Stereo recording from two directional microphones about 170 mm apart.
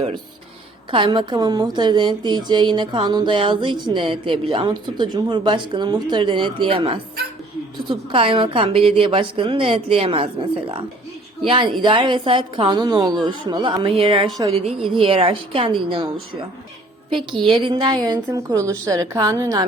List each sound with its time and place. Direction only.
0.9 s a woman's voice: 30° right (ahead or behind)